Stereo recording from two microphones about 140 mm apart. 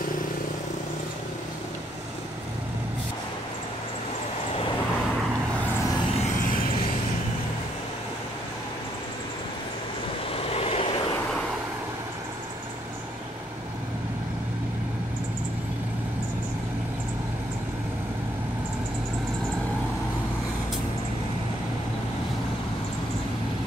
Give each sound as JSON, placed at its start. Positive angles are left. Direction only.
{"t": 10.3, "sound": "vehicle", "side_deg": 45}